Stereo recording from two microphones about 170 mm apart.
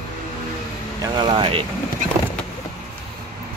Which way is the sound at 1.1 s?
25° right (ahead or behind).